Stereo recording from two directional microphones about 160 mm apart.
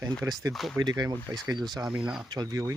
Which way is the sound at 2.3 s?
25° right (ahead or behind).